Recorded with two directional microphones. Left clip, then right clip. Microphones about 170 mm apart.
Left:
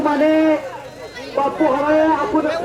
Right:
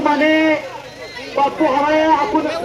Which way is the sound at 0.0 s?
60° left (ahead or behind).